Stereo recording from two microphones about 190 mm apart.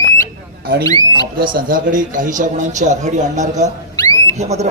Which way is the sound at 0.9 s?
20° left (ahead or behind).